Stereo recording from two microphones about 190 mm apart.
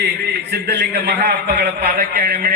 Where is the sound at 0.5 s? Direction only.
60° right (ahead or behind).